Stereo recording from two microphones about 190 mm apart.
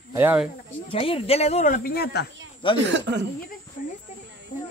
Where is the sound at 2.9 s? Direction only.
65° right (ahead or behind).